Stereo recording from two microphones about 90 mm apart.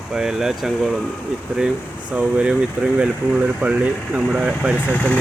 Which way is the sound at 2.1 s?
10° right (ahead or behind).